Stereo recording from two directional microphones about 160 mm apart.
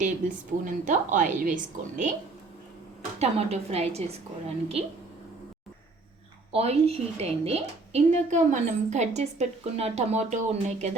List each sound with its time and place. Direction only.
0.0 s a woman's voice: 55° right (ahead or behind)
3.2 s a woman's voice: 40° right (ahead or behind)
6.5 s a woman's voice: 40° right (ahead or behind)